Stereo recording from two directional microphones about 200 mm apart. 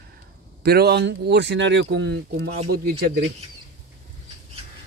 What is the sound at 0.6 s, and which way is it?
Speech, 55° right (ahead or behind).